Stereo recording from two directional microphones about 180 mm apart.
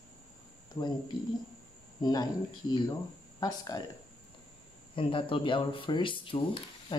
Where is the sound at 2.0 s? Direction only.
20° left (ahead or behind).